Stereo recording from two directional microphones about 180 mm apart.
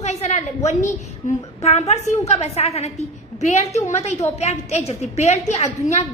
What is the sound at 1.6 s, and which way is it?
A woman's voice, 35° left (ahead or behind).